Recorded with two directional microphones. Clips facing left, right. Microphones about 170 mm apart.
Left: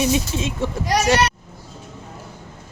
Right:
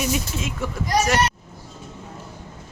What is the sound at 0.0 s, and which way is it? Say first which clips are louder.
Speech: left 5 dB; 25° left (ahead or behind).